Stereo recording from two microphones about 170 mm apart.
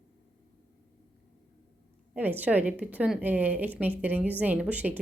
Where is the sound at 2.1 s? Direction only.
10° right (ahead or behind).